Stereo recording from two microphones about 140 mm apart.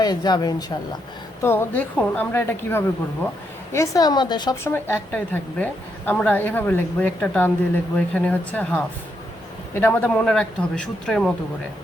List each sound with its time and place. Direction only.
0.0 s a woman's voice: 30° left (ahead or behind)
1.4 s a woman's voice: 15° left (ahead or behind); by 4.5 s 30° left (ahead or behind)
4.6 s a woman's voice: 15° left (ahead or behind)